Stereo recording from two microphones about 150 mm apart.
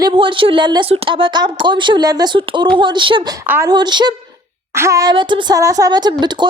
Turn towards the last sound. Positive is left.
turn(degrees=-30)  # may be behind; listen again after turning